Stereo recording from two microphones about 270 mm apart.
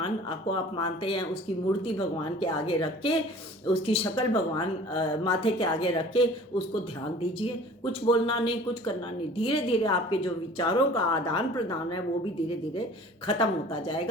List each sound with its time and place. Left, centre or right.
0.0 s speech: centre
8.0 s a woman's voice: centre
13.3 s speech: centre